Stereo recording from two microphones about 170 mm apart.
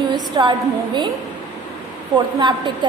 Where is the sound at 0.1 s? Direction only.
25° right (ahead or behind).